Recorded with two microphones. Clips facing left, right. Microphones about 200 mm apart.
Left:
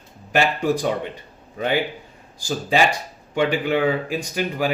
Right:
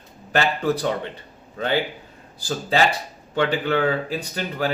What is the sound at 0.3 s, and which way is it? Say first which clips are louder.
Speech: left 2 dB; 15° left (ahead or behind).